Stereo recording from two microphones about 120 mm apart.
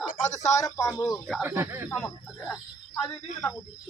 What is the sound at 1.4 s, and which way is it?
Speech, 20° right (ahead or behind).